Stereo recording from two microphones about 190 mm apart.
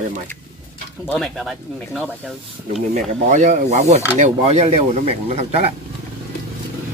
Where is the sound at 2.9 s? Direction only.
40° right (ahead or behind).